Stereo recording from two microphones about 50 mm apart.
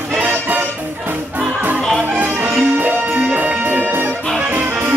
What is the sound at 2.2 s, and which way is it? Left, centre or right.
Music, right.